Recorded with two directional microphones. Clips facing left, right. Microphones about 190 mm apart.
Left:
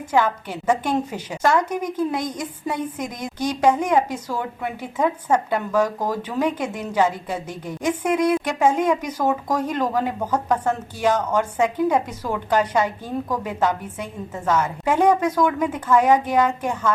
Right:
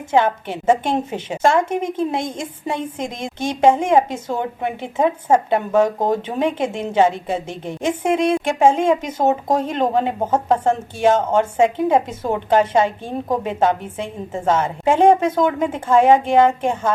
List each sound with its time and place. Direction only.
0.1 s a woman's voice: 25° right (ahead or behind)